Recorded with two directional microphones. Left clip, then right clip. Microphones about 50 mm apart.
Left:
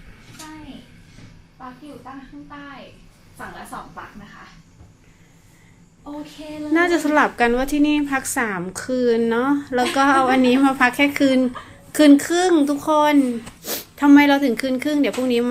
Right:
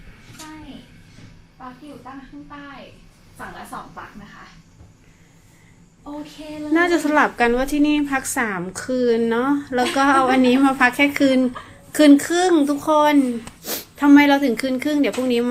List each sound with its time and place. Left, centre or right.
1.5 s a woman's voice: left
6.1 s a woman's voice: centre
6.7 s a woman's voice: left
13.2 s a woman's voice: centre
13.6 s speech: left